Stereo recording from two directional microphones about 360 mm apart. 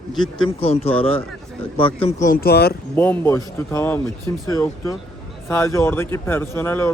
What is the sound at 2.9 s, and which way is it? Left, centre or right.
A man's voice, centre.